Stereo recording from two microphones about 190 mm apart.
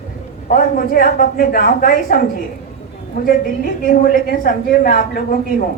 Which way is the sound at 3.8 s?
50° left (ahead or behind).